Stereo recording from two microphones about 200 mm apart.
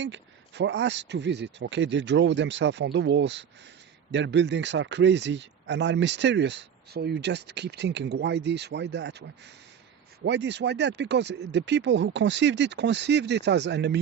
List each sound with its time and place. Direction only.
0.0 s speech: 65° right (ahead or behind)